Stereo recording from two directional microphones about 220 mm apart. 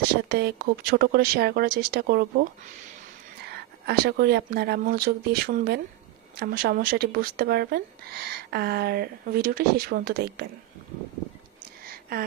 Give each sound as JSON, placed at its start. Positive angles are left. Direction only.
{"t": 0.3, "sound": "speech", "side_deg": -45}
{"t": 3.5, "sound": "speech", "side_deg": -45}
{"t": 11.9, "sound": "a sound", "side_deg": -40}